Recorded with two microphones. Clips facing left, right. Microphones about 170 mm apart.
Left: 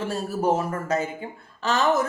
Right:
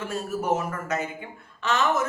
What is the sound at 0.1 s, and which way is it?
Speech, 35° left (ahead or behind).